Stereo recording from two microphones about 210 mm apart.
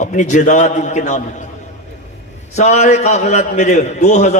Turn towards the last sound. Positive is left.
turn(degrees=35)  # may be behind; listen again after turning